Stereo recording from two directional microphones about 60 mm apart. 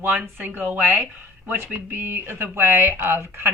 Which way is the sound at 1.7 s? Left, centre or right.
Right.